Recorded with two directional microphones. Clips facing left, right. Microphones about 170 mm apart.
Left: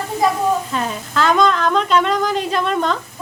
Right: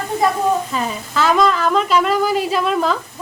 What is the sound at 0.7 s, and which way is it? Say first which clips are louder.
Speech: even; 5° right (ahead or behind).